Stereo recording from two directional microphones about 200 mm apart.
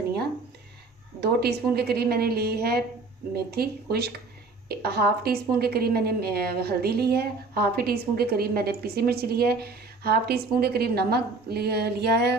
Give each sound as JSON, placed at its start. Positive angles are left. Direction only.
{"t": 1.2, "sound": "a woman's voice", "side_deg": -55}